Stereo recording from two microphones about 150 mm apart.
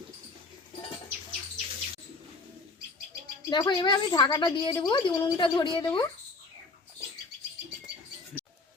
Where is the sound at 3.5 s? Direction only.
30° left (ahead or behind).